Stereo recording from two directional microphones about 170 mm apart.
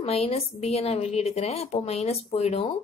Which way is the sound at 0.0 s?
35° left (ahead or behind).